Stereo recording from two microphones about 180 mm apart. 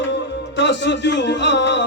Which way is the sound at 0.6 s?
80° left.